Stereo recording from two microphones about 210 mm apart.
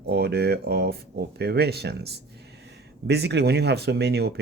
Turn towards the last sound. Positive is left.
turn(degrees=-50)  # may be behind; listen again after turning